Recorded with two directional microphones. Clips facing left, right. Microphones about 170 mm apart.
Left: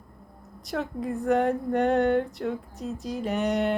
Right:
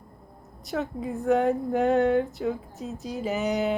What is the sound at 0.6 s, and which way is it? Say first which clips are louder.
Speech: even; centre (ahead or behind).